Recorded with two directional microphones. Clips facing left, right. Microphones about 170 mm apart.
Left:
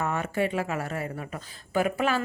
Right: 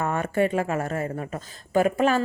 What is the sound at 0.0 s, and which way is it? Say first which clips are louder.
A woman's voice: right 4 dB; 50° right (ahead or behind).